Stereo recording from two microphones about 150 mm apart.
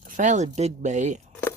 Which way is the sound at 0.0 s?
55° right (ahead or behind).